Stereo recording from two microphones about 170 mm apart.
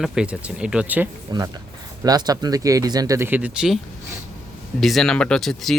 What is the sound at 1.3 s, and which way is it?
Speech, 25° right (ahead or behind).